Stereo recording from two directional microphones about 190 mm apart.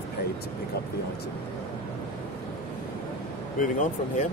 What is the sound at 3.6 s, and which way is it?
Speech, 45° left (ahead or behind).